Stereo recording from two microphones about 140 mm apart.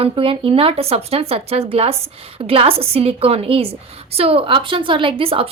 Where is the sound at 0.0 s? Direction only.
40° right (ahead or behind).